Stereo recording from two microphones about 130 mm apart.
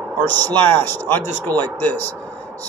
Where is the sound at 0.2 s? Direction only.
15° left (ahead or behind).